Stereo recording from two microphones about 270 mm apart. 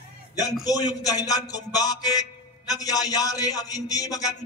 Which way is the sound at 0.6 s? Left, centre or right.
Centre.